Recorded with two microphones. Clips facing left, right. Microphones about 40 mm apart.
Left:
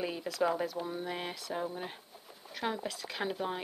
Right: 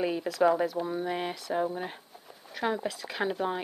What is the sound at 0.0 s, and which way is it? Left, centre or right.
Speech, centre.